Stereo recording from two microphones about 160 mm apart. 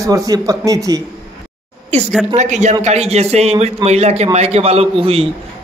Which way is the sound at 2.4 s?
45° right (ahead or behind).